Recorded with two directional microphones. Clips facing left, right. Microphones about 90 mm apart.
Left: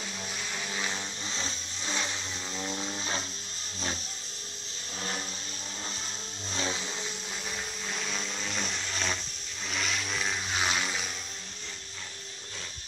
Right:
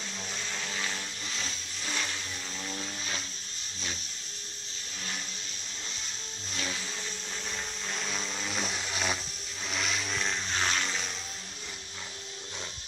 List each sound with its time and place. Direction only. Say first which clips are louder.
0.5 s vehicle: left 1 dB; 10° left (ahead or behind)
6.5 s vehicle: left 3 dB; 25° left (ahead or behind)
7.9 s vehicle: even; centre (ahead or behind)